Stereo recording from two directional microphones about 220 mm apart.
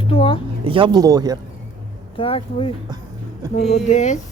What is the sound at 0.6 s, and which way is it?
Speech, 25° right (ahead or behind).